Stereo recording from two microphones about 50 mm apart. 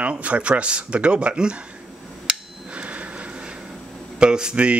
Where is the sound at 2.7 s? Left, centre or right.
Right.